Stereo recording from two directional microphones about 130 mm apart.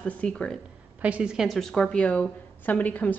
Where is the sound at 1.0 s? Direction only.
10° right (ahead or behind).